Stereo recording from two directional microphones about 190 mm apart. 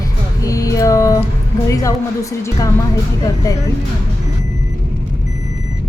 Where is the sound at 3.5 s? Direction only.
20° left (ahead or behind).